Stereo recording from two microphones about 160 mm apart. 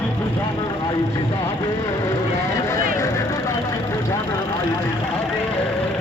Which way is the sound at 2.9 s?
20° left (ahead or behind).